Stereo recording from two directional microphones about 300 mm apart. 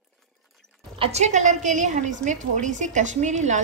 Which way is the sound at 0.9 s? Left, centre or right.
Centre.